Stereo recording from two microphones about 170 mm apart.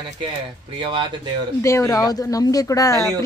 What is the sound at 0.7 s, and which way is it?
Speech, 30° right (ahead or behind).